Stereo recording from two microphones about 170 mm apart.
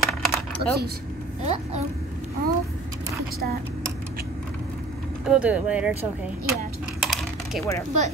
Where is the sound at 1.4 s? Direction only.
40° right (ahead or behind).